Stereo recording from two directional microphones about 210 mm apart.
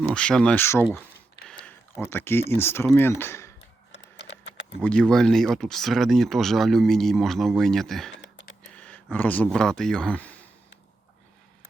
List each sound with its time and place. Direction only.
0.0 s speech: 5° left (ahead or behind)
1.6 s a sound: 10° left (ahead or behind)
2.5 s speech: 10° left (ahead or behind)
3.9 s typing: 55° left (ahead or behind)
4.8 s speech: 5° left (ahead or behind)